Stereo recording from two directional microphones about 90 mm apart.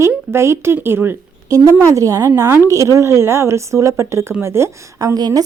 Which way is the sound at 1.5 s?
40° right (ahead or behind).